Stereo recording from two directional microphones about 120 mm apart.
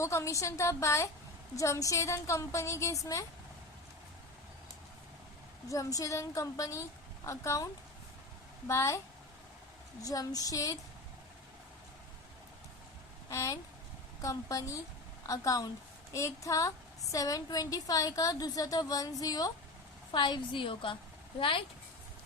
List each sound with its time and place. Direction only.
0.0 s a woman's voice: 25° left (ahead or behind)
5.6 s a woman's voice: 25° left (ahead or behind)
10.0 s a woman's voice: 30° left (ahead or behind)
13.3 s a woman's voice: 25° left (ahead or behind); by 21.6 s 45° left (ahead or behind)